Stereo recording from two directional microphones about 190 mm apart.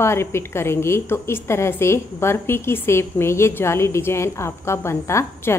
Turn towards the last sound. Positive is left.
turn(degrees=15)  # may be behind; listen again after turning